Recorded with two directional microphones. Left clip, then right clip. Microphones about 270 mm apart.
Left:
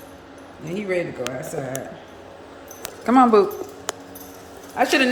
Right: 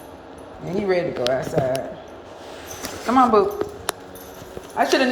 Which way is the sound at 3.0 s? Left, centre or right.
Left.